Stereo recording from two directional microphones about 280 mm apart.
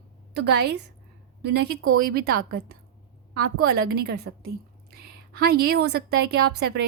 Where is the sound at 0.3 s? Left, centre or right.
Right.